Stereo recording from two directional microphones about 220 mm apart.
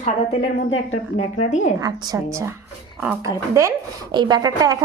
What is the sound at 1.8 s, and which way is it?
A woman's voice, 15° right (ahead or behind).